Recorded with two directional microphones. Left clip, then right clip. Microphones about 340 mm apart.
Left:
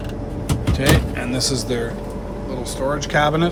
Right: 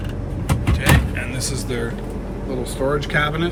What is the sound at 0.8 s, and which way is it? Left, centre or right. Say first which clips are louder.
Power windows: left 2 dB; centre.